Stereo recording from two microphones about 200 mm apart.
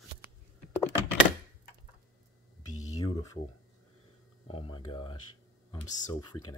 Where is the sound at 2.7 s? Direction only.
35° left (ahead or behind).